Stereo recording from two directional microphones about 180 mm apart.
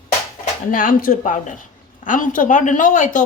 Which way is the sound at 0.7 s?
50° left (ahead or behind).